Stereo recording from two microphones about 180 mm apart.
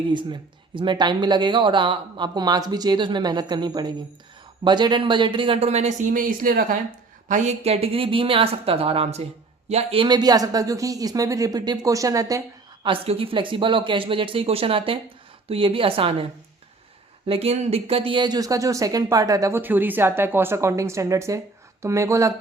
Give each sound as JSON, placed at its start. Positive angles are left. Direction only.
{"t": 0.1, "sound": "speech", "side_deg": -25}
{"t": 12.8, "sound": "speech", "side_deg": -30}
{"t": 17.2, "sound": "speech", "side_deg": -35}